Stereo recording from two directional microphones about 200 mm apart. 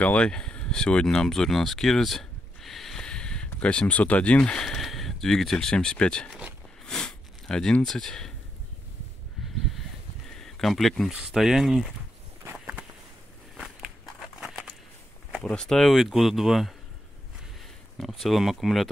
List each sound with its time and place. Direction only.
0.0 s speech: 5° left (ahead or behind)
6.4 s a sound: 5° left (ahead or behind)
10.3 s speech: centre (ahead or behind)
12.4 s walk: 5° right (ahead or behind)
14.4 s a sound: centre (ahead or behind)
15.3 s speech: 5° left (ahead or behind)
17.9 s speech: centre (ahead or behind)